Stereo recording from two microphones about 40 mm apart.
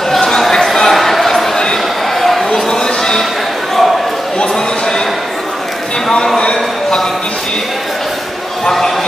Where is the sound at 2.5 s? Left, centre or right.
Centre.